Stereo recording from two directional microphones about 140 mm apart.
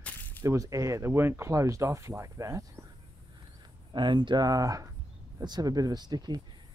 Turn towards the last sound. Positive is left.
turn(degrees=-30)  # may be behind; listen again after turning